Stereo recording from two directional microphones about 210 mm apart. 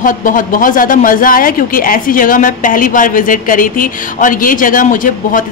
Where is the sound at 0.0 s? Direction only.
40° left (ahead or behind).